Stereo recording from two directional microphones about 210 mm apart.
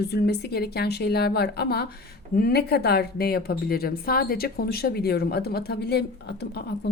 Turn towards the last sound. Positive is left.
turn(degrees=50)  # may be behind; listen again after turning